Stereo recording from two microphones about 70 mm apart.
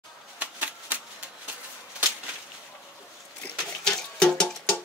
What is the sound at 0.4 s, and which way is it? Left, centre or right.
Typewriter, right.